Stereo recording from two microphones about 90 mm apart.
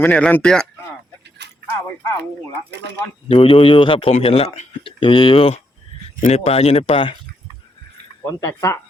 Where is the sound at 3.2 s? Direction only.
75° left (ahead or behind).